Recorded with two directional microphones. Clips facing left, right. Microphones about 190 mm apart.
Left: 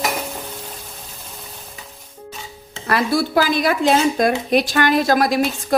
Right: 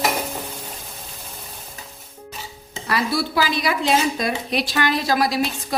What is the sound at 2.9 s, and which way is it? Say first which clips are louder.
A woman's voice: left 4 dB; 50° left (ahead or behind).